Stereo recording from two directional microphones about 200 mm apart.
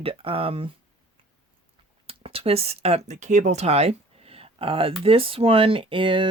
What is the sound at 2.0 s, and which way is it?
Speech, 30° right (ahead or behind).